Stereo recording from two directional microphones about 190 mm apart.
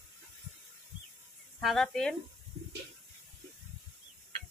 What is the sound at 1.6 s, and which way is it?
Speech, centre (ahead or behind).